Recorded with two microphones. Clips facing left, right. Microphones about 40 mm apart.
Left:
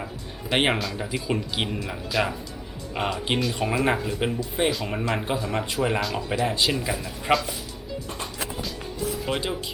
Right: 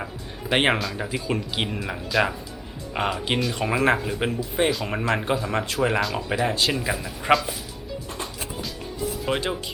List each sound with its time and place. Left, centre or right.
0.0 s a sound: centre
0.9 s speech: centre
9.2 s speech: centre